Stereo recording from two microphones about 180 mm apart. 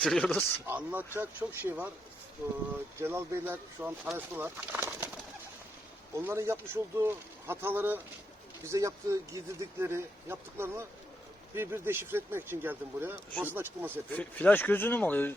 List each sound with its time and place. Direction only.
0.0 s speech: 5° left (ahead or behind)
0.7 s speech: 10° right (ahead or behind)
3.0 s speech: 15° right (ahead or behind)
6.1 s speech: 15° right (ahead or behind)
14.1 s speech: 10° left (ahead or behind)